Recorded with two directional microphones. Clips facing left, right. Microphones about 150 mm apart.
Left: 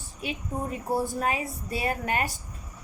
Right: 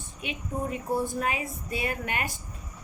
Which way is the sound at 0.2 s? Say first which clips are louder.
Even; 35° left (ahead or behind).